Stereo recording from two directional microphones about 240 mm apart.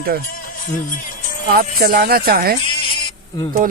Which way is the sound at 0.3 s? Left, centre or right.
Left.